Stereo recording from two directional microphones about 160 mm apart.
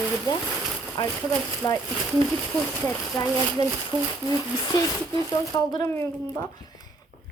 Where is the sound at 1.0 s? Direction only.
30° left (ahead or behind).